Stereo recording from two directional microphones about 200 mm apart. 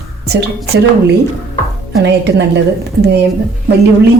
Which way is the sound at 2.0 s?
60° right (ahead or behind).